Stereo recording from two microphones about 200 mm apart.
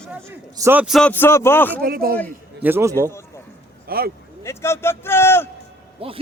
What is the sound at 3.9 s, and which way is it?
Speech, 50° right (ahead or behind).